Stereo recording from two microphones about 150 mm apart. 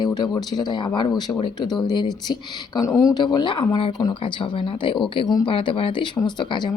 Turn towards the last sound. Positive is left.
turn(degrees=30)  # may be behind; listen again after turning